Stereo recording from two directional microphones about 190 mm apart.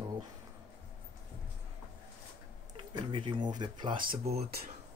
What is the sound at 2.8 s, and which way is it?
Speech, 25° right (ahead or behind).